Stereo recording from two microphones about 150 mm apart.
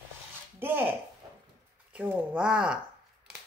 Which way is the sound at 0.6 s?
15° right (ahead or behind).